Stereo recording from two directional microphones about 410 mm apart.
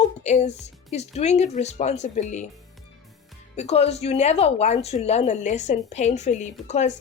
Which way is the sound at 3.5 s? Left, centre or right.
Centre.